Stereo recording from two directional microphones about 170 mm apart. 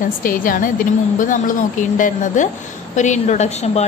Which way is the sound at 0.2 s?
55° left (ahead or behind).